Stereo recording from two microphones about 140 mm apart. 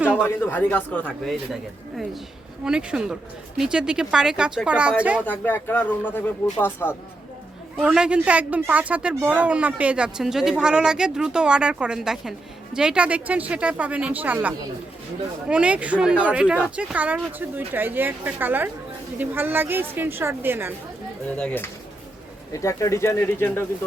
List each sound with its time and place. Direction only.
0.0 s a sound: 10° right (ahead or behind)
0.3 s speech: 15° left (ahead or behind)
2.6 s speech: 5° right (ahead or behind)
5.2 s speech: 15° left (ahead or behind)
7.9 s speech: 5° right (ahead or behind)
21.2 s speech: 10° left (ahead or behind)
22.5 s speech: 20° left (ahead or behind)